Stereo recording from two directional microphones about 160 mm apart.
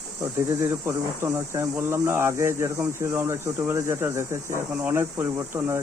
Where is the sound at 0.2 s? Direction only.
15° right (ahead or behind).